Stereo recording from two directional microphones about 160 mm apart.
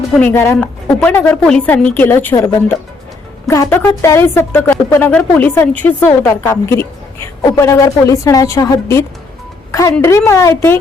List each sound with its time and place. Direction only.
0.2 s a woman's voice: 15° left (ahead or behind)